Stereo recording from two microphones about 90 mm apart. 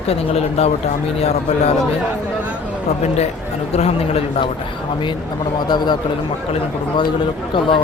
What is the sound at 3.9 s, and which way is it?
Speech, 90° left.